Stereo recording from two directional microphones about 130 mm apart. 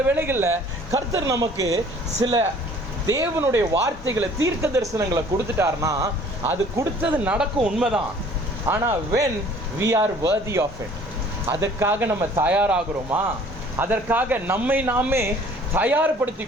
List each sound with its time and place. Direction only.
0.2 s speech: 15° right (ahead or behind); by 2.4 s 35° right (ahead or behind)
3.7 s speech: 25° right (ahead or behind); by 8.0 s 5° right (ahead or behind)
8.6 s speech: 20° right (ahead or behind)